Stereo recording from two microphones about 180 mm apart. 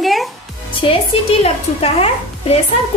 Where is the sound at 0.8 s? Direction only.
35° left (ahead or behind).